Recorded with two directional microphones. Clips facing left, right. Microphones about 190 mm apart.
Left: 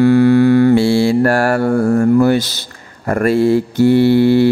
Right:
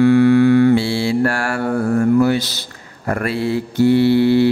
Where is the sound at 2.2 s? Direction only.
50° left (ahead or behind).